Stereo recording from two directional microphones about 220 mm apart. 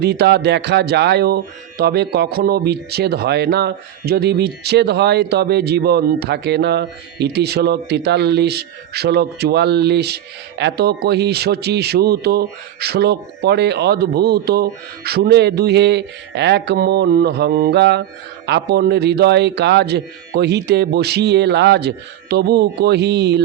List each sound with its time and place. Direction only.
0.0 s speech: 50° right (ahead or behind)